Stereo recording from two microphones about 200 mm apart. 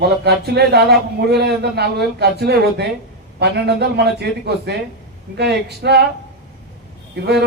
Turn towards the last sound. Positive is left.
turn(degrees=-55)  # may be behind; listen again after turning